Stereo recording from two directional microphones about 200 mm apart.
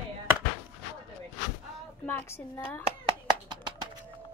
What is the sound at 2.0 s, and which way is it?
Speech, 10° left (ahead or behind).